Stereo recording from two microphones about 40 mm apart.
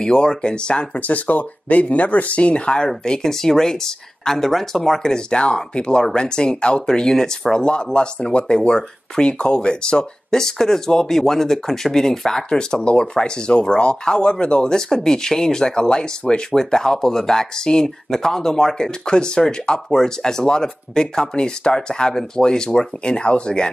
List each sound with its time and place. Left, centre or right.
0.0 s speech: centre
0.9 s speech: left